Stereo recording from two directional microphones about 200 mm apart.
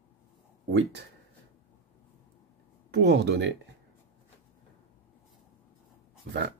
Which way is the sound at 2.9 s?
60° right (ahead or behind).